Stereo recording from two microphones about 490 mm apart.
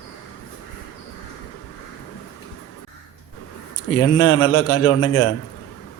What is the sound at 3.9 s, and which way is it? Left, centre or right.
A man's voice, left.